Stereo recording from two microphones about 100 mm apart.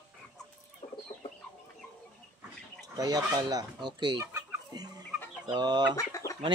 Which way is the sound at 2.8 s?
40° right (ahead or behind).